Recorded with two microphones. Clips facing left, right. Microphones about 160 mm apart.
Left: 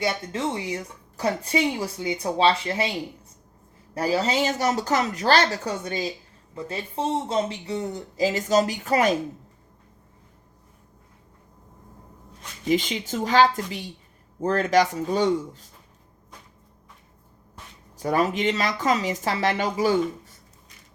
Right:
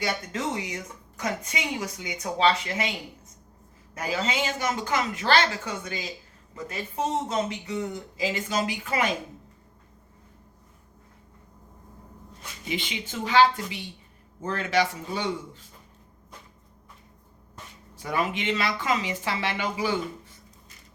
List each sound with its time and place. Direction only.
0.0 s speech: 30° left (ahead or behind)
12.6 s a woman's voice: 40° left (ahead or behind)
17.9 s speech: 40° left (ahead or behind)